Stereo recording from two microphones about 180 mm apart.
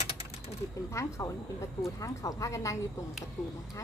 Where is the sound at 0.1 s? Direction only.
35° left (ahead or behind).